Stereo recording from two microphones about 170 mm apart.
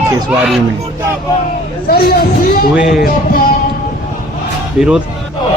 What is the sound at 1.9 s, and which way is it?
Speech, 65° left (ahead or behind).